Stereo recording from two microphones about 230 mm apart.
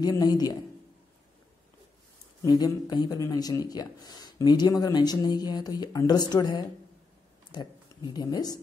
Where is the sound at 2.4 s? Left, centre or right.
Centre.